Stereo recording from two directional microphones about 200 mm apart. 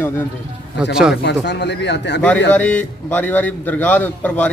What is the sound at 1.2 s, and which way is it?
A man's voice, 55° left (ahead or behind).